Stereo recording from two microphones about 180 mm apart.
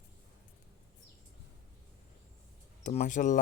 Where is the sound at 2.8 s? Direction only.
40° left (ahead or behind).